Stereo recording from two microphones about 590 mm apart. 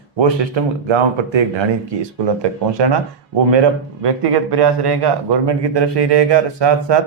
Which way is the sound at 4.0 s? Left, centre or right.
Right.